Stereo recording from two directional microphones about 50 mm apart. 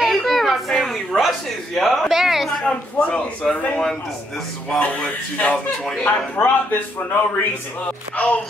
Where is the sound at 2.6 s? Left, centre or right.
Left.